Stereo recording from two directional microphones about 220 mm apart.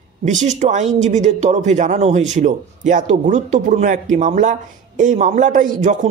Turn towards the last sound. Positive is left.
turn(degrees=-35)  # may be behind; listen again after turning